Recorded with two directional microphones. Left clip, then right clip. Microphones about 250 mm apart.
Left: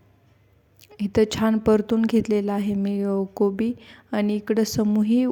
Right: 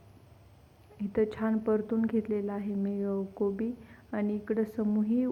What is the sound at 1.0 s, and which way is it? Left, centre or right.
A woman's voice, left.